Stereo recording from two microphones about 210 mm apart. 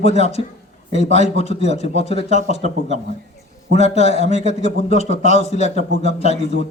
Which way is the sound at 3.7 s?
30° left (ahead or behind).